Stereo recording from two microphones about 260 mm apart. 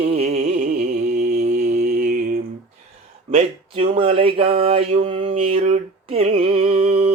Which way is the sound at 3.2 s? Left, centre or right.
Right.